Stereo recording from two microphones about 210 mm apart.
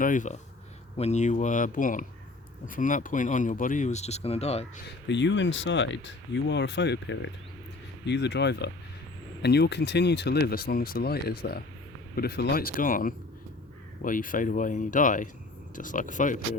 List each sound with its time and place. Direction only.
0.0 s speech: 40° left (ahead or behind)
5.0 s speech: 55° left (ahead or behind); by 16.4 s 40° left (ahead or behind)